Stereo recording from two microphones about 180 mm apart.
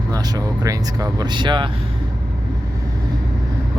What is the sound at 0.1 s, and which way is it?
Speech, 20° right (ahead or behind).